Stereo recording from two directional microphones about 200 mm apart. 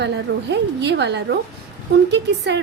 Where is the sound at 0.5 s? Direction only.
60° right (ahead or behind).